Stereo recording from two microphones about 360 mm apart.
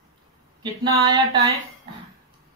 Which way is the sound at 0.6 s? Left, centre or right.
Centre.